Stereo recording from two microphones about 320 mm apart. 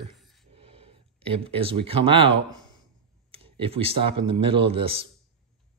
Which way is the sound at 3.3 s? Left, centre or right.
Centre.